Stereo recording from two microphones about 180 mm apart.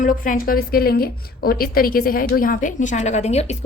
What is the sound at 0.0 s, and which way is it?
A woman's voice, 50° left (ahead or behind).